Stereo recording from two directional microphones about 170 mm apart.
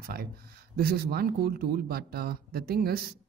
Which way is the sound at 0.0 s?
60° right (ahead or behind).